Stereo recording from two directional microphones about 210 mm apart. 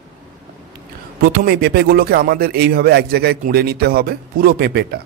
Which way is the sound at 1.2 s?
45° right (ahead or behind).